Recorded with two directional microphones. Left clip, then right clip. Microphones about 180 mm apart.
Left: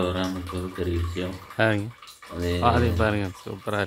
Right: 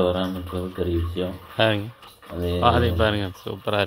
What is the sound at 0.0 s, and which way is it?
Speech, 10° right (ahead or behind).